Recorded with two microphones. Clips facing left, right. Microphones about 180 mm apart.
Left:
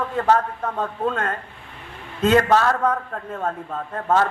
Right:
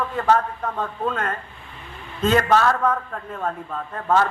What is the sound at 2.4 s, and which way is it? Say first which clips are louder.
A man's voice: even; 30° left (ahead or behind).